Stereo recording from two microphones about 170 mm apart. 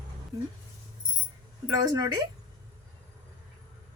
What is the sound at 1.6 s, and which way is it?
Speech, 20° right (ahead or behind).